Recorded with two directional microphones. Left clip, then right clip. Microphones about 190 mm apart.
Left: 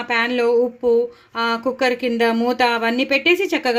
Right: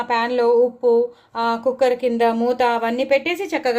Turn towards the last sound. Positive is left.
turn(degrees=35)  # may be behind; listen again after turning